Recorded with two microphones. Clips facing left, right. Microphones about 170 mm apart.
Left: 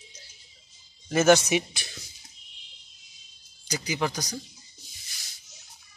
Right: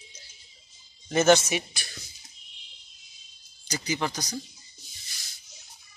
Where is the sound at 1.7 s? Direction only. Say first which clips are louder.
Left 1 dB; 20° left (ahead or behind).